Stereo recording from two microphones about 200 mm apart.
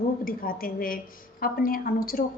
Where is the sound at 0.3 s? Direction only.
45° left (ahead or behind).